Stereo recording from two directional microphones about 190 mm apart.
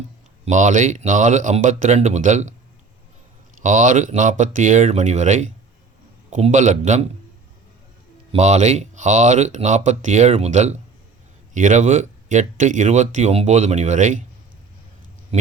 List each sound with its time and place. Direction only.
0.4 s speech: 40° right (ahead or behind)
3.6 s speech: 40° right (ahead or behind)
8.3 s speech: 35° right (ahead or behind)
15.3 s speech: 30° right (ahead or behind)